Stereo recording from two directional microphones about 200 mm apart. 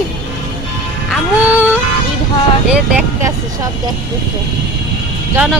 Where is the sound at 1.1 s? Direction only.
10° right (ahead or behind).